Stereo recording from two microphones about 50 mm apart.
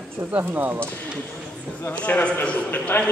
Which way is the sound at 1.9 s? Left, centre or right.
Left.